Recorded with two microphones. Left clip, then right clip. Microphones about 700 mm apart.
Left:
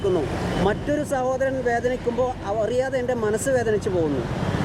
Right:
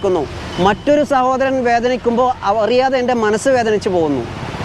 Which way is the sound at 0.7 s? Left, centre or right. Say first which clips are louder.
Right 11 dB; right.